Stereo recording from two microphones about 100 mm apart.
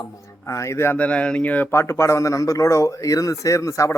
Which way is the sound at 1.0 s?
10° left (ahead or behind).